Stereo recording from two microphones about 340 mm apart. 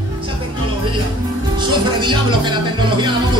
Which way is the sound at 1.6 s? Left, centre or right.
Centre.